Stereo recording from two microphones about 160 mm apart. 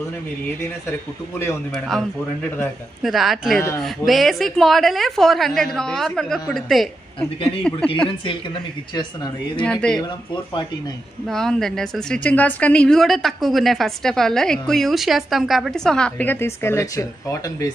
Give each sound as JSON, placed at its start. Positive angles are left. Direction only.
{"t": 1.7, "sound": "a woman's voice", "side_deg": 0}
{"t": 7.3, "sound": "speech", "side_deg": 35}
{"t": 9.6, "sound": "a woman's voice", "side_deg": 5}
{"t": 9.9, "sound": "speech", "side_deg": 30}
{"t": 11.2, "sound": "a woman's voice", "side_deg": 0}